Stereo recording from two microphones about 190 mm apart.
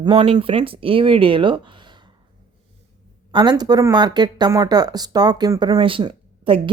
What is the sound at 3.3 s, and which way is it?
Speech, 25° right (ahead or behind).